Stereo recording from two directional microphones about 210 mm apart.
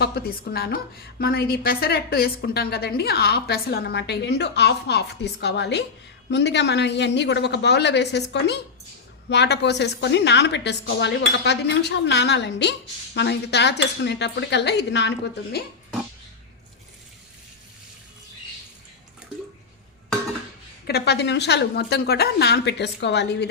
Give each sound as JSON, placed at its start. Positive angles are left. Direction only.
{"t": 0.0, "sound": "a woman's voice", "side_deg": 45}
{"t": 20.8, "sound": "a woman's voice", "side_deg": 50}